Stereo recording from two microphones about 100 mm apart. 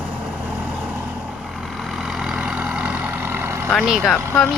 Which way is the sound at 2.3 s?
10° right (ahead or behind).